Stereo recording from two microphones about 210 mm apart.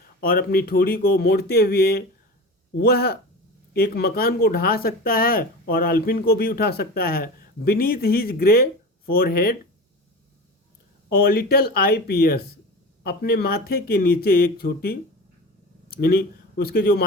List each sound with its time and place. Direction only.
0.2 s speech: 45° left (ahead or behind)
11.1 s speech: 45° left (ahead or behind)